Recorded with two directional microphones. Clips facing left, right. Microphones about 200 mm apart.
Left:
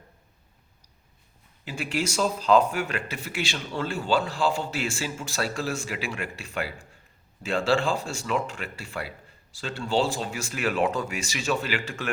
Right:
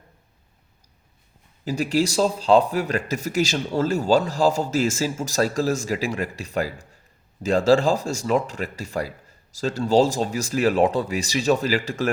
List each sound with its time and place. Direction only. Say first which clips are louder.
1.6 s speech: right 8 dB; 40° right (ahead or behind)